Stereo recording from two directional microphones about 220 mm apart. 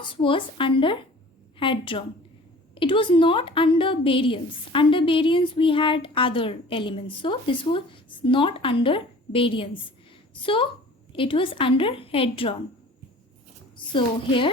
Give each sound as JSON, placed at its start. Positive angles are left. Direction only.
{"t": 0.2, "sound": "a woman's voice", "side_deg": 25}
{"t": 13.9, "sound": "a woman's voice", "side_deg": 25}